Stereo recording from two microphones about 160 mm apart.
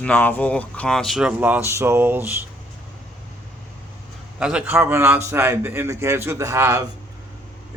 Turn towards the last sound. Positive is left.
turn(degrees=-20)  # may be behind; listen again after turning